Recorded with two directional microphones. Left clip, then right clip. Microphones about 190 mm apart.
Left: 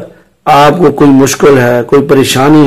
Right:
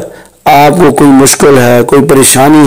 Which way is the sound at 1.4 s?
30° right (ahead or behind).